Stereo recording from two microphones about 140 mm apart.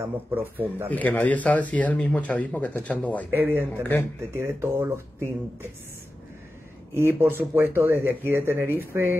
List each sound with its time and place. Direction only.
0.0 s speech: 15° right (ahead or behind)
0.8 s speech: 10° left (ahead or behind)
3.3 s speech: 15° right (ahead or behind)
7.0 s speech: 15° right (ahead or behind)